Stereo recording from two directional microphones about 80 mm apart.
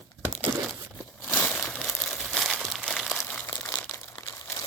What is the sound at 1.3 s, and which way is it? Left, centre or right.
Crumpling, centre.